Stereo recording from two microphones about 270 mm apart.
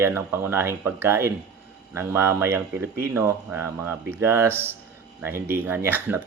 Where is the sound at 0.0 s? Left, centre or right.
Centre.